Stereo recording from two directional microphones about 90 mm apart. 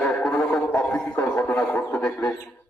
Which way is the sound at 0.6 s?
20° left (ahead or behind).